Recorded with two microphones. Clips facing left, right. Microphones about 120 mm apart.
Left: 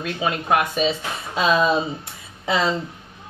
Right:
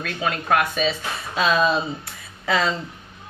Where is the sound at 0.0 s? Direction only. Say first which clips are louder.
Left 2 dB; 20° left (ahead or behind).